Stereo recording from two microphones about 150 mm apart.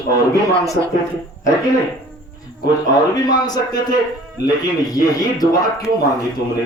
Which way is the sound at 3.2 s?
25° left (ahead or behind).